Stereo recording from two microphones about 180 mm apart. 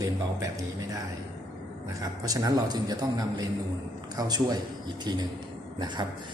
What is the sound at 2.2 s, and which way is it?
Speech, 20° right (ahead or behind).